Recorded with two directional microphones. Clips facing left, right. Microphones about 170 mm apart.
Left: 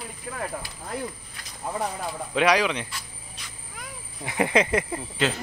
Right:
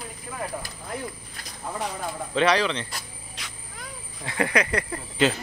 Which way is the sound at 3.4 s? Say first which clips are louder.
Right 5 dB; 85° right.